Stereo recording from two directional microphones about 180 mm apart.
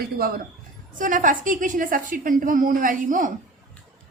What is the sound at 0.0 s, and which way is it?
A man's voice, 55° right (ahead or behind).